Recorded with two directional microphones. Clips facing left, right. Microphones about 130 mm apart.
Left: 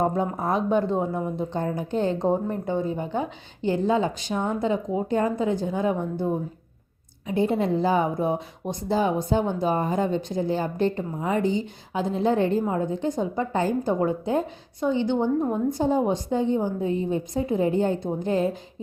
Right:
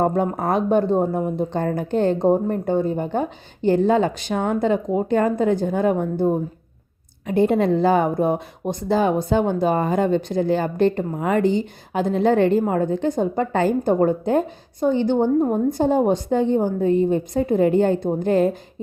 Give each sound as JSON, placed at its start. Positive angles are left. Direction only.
{"t": 0.0, "sound": "a woman's voice", "side_deg": -60}
{"t": 7.3, "sound": "speech", "side_deg": -65}
{"t": 14.0, "sound": "a woman's voice", "side_deg": -55}
{"t": 15.5, "sound": "a woman's voice", "side_deg": -60}